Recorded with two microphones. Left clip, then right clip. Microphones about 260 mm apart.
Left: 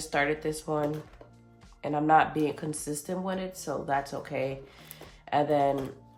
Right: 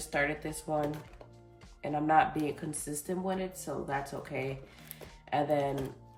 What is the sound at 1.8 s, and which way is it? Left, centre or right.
Speech, centre.